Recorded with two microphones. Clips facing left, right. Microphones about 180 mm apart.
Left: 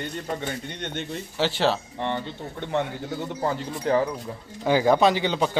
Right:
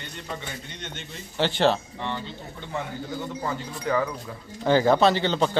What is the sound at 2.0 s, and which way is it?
Speech, 55° left (ahead or behind).